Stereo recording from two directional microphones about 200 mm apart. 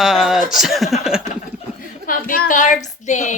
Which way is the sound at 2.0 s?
45° left (ahead or behind).